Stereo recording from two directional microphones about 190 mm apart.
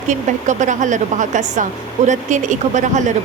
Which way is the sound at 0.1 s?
40° right (ahead or behind).